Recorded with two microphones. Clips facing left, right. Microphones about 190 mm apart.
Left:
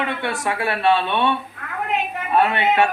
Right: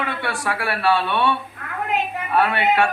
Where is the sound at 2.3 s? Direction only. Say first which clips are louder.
Left 1 dB; 25° left (ahead or behind).